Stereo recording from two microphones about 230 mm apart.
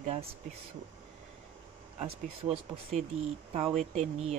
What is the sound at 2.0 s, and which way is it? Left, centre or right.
Speech, right.